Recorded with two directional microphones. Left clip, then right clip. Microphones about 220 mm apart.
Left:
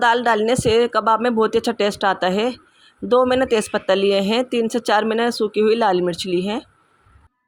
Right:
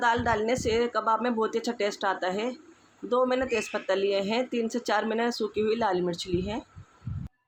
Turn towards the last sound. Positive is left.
turn(degrees=35)  # may be behind; listen again after turning